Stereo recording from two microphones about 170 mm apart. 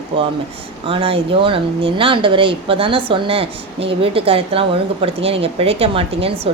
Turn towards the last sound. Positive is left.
turn(degrees=-35)  # may be behind; listen again after turning